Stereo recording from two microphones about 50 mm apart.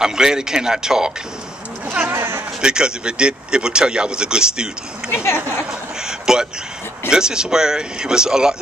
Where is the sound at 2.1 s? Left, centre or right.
Right.